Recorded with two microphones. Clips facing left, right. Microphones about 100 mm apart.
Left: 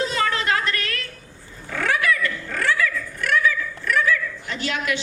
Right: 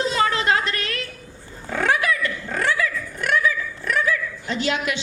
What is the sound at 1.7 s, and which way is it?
Dog, 20° right (ahead or behind).